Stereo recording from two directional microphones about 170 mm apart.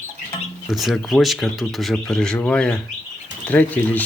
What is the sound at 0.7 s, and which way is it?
Speech, centre (ahead or behind).